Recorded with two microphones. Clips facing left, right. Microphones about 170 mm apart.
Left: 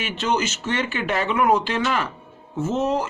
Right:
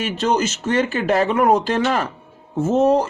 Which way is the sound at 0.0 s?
40° right (ahead or behind).